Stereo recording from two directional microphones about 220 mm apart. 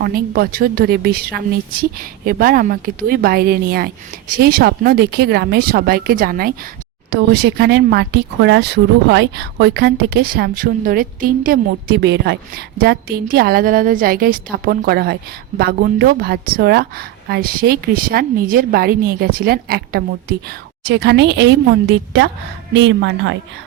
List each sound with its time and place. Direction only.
0.0 s speech: 45° right (ahead or behind)